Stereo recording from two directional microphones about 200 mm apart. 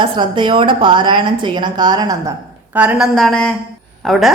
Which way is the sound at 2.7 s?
5° right (ahead or behind).